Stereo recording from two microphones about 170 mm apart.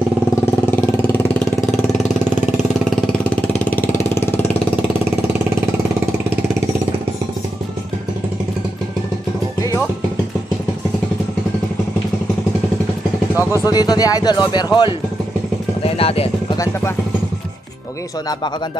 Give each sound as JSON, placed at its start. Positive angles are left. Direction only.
{"t": 0.7, "sound": "vehicle", "side_deg": 10}
{"t": 3.3, "sound": "vehicle", "side_deg": 10}
{"t": 13.5, "sound": "speech", "side_deg": 20}
{"t": 15.8, "sound": "vehicle", "side_deg": 35}
{"t": 16.5, "sound": "speech", "side_deg": 15}